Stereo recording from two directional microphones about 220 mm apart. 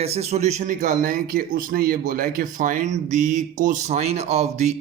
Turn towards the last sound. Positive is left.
turn(degrees=-30)  # may be behind; listen again after turning